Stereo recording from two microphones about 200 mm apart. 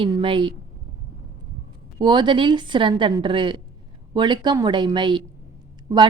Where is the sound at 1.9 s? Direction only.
20° right (ahead or behind).